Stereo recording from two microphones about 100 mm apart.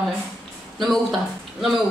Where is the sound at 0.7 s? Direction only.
Centre (ahead or behind).